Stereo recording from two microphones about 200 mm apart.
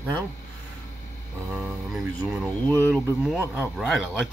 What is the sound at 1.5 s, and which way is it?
Speech, 5° right (ahead or behind).